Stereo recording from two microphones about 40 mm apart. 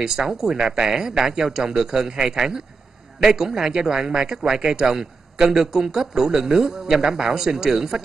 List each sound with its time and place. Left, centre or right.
0.0 s a man's voice: centre
3.4 s a man's voice: centre